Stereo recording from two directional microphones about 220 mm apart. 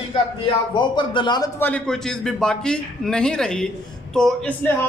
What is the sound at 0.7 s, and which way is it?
A man's voice, 20° left (ahead or behind).